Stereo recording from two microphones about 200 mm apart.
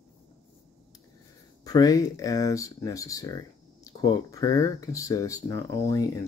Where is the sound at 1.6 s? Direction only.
20° left (ahead or behind).